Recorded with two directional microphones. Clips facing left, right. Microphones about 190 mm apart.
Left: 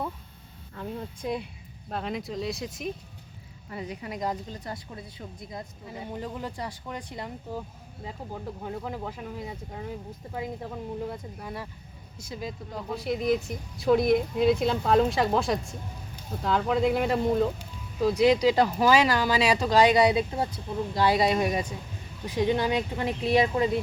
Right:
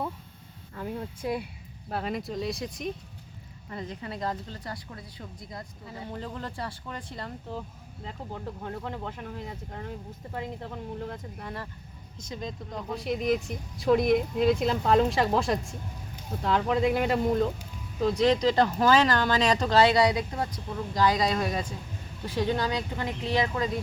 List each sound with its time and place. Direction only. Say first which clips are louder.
0.8 s speech: right 1 dB; 5° right (ahead or behind)
3.8 s a woman's voice: left 1 dB; 10° left (ahead or behind)
8.6 s a woman's voice: left 2 dB; 5° left (ahead or behind)